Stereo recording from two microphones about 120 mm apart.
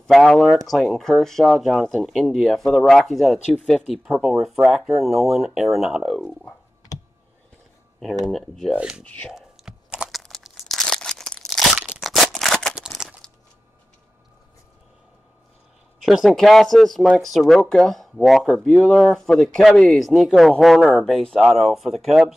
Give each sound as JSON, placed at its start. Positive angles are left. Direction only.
{"t": 0.0, "sound": "speech", "side_deg": 5}
{"t": 6.1, "sound": "speech", "side_deg": 10}
{"t": 8.3, "sound": "speech", "side_deg": 5}
{"t": 9.0, "sound": "speech", "side_deg": 10}
{"t": 9.3, "sound": "crumpling", "side_deg": -5}
{"t": 11.9, "sound": "a sound", "side_deg": 0}
{"t": 16.0, "sound": "speech", "side_deg": 0}